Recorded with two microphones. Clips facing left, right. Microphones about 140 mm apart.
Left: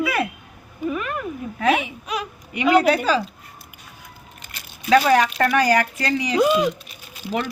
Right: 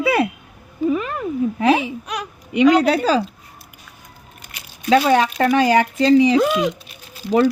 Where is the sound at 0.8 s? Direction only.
30° right (ahead or behind).